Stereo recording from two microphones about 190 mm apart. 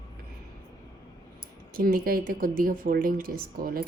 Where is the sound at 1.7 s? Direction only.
50° right (ahead or behind).